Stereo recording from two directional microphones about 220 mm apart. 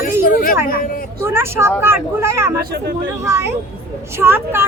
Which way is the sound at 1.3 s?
10° right (ahead or behind).